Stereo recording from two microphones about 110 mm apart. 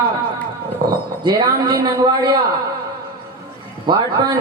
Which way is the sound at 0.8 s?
40° right (ahead or behind).